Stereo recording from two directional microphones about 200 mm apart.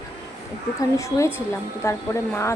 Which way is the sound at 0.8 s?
15° left (ahead or behind).